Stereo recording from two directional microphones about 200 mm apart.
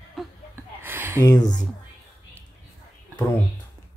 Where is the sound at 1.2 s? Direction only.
20° left (ahead or behind).